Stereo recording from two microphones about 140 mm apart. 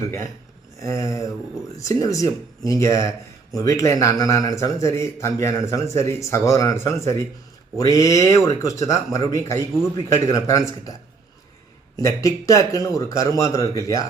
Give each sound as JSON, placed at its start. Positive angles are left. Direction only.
{"t": 0.8, "sound": "speech", "side_deg": 25}
{"t": 11.9, "sound": "speech", "side_deg": 25}